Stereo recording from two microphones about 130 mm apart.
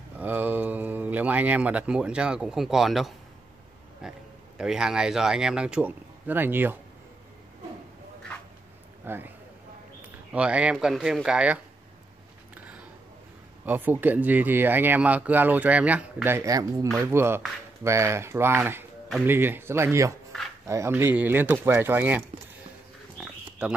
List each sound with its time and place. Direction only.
0.2 s speech: 15° right (ahead or behind)
9.0 s speech: 15° right (ahead or behind)
10.3 s speech: 10° right (ahead or behind)
13.7 s speech: 15° right (ahead or behind)
16.3 s speech: 25° right (ahead or behind)